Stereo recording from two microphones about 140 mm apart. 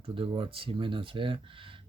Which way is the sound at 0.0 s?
40° right (ahead or behind).